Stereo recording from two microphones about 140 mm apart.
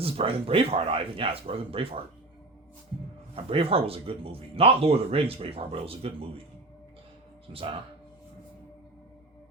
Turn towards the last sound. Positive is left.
turn(degrees=-40)  # may be behind; listen again after turning